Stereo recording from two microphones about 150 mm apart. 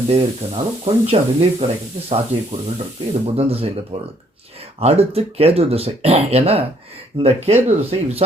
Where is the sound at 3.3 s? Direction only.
40° right (ahead or behind).